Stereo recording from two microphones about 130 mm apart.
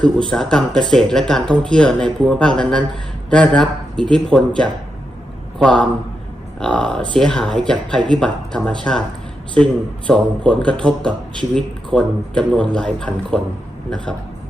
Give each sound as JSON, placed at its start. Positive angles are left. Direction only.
{"t": 0.3, "sound": "speech", "side_deg": 5}
{"t": 10.1, "sound": "speech", "side_deg": 5}